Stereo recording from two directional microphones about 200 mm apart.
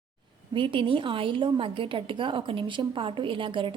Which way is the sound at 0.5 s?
25° right (ahead or behind).